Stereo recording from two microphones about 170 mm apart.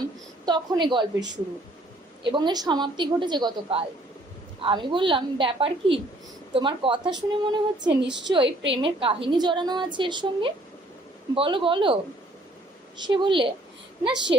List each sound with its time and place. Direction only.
0.4 s a woman's voice: 25° right (ahead or behind)
2.2 s a woman's voice: 25° right (ahead or behind)
8.7 s a woman's voice: 30° right (ahead or behind)
13.0 s a woman's voice: 30° right (ahead or behind)